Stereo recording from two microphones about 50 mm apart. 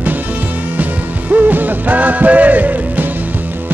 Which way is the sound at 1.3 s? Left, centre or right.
Right.